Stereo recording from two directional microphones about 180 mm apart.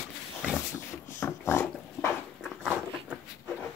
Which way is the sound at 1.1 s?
15° left (ahead or behind).